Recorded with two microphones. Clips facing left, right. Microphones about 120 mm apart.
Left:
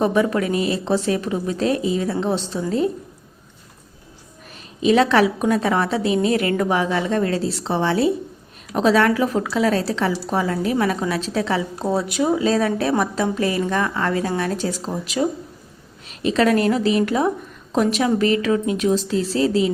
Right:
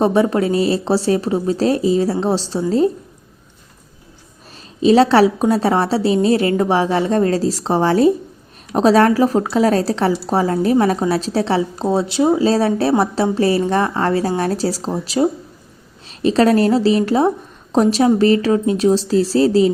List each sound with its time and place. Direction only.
0.0 s a woman's voice: 30° right (ahead or behind)
4.8 s a woman's voice: 30° right (ahead or behind)